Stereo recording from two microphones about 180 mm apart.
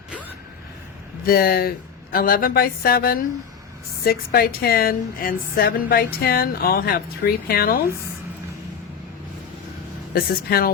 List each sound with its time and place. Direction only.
1.2 s a woman's voice: 55° left (ahead or behind)
10.2 s a woman's voice: 55° left (ahead or behind)